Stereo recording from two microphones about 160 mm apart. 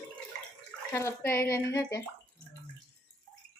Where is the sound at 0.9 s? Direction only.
15° left (ahead or behind).